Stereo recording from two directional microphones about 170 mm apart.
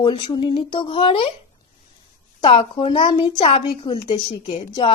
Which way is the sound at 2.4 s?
30° left (ahead or behind).